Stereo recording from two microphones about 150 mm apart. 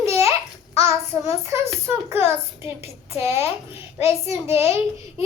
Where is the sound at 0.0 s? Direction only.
20° right (ahead or behind).